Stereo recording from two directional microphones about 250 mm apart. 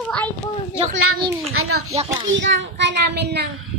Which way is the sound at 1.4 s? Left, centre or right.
Right.